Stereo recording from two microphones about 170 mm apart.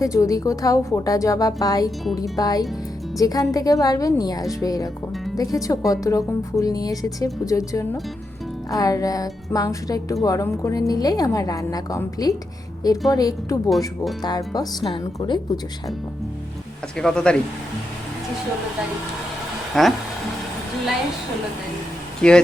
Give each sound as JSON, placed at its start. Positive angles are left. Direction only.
{"t": 0.0, "sound": "a woman's voice", "side_deg": 20}
{"t": 13.7, "sound": "speech", "side_deg": 0}
{"t": 14.2, "sound": "a woman's voice", "side_deg": 25}
{"t": 17.0, "sound": "speech", "side_deg": 5}
{"t": 19.7, "sound": "speech", "side_deg": 0}
{"t": 22.2, "sound": "speech", "side_deg": 5}